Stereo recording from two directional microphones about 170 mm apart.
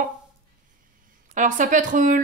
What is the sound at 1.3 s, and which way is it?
Speech, 50° right (ahead or behind).